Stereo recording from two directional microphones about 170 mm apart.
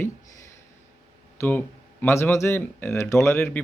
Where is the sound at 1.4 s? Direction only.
10° left (ahead or behind).